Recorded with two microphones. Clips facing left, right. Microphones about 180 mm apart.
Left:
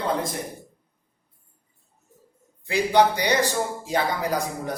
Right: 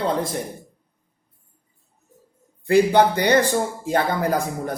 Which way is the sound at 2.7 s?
55° right (ahead or behind).